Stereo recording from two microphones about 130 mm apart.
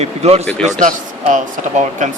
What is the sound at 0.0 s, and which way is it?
Speech, 55° right (ahead or behind).